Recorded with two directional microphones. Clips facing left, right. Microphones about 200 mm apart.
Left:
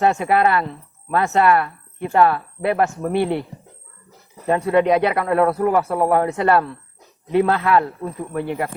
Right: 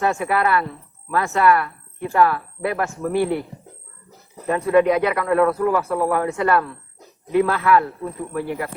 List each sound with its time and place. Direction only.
0.0 s speech: 25° left (ahead or behind)
4.4 s speech: 30° left (ahead or behind)